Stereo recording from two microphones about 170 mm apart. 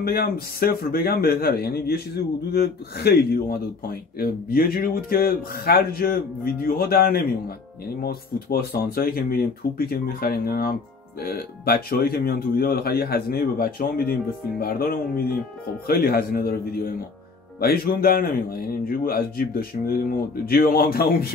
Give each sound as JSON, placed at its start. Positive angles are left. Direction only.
{"t": 0.0, "sound": "speech", "side_deg": 65}